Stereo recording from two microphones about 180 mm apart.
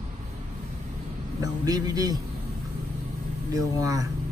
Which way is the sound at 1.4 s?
20° right (ahead or behind).